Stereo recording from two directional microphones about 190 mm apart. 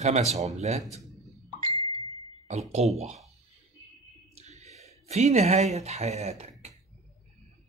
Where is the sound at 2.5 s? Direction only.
35° right (ahead or behind).